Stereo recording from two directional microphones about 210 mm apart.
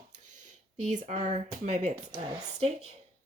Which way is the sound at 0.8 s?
35° right (ahead or behind).